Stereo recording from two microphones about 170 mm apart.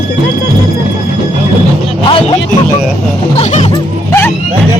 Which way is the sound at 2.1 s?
30° left (ahead or behind).